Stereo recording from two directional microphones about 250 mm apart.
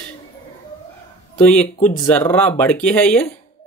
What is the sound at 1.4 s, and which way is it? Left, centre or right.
Speech, centre.